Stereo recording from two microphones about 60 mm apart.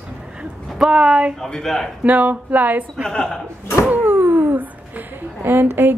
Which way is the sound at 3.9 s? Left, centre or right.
Right.